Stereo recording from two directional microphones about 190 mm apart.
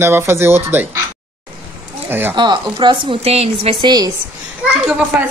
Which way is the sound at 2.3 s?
25° right (ahead or behind).